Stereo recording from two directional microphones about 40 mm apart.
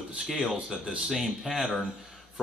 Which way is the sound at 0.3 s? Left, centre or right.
Centre.